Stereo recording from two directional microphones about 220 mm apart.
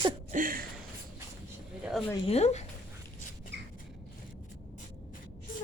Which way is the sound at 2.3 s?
30° left (ahead or behind).